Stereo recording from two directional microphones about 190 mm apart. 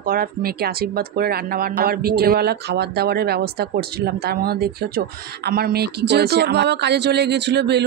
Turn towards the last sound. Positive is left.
turn(degrees=-65)  # may be behind; listen again after turning